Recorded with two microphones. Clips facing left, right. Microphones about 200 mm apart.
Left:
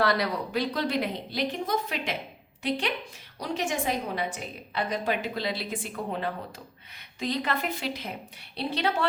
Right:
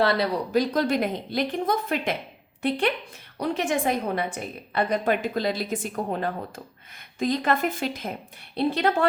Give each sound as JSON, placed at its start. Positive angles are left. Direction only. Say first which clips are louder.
{"t": 0.0, "sound": "speech", "louder": "right 3 dB", "side_deg": -30}
{"t": 0.5, "sound": "a woman's voice", "louder": "right 6 dB", "side_deg": -45}